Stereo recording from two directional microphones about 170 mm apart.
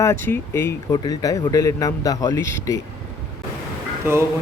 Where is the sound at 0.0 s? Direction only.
15° left (ahead or behind).